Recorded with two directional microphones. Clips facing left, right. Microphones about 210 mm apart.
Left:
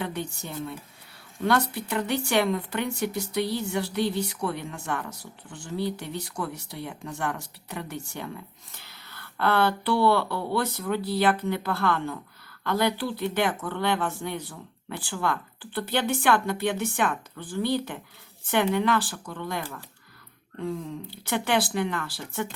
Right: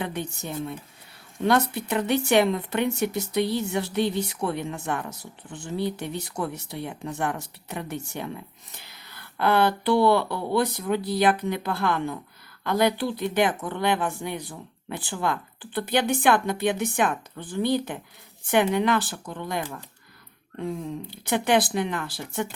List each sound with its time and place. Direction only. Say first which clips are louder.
0.0 s speech: right 1 dB; 20° right (ahead or behind)